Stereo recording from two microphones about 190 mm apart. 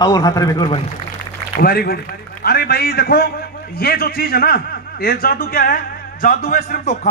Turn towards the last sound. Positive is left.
turn(degrees=45)  # may be behind; listen again after turning